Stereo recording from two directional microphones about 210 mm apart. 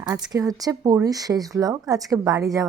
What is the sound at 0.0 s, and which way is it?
Speech, 15° right (ahead or behind).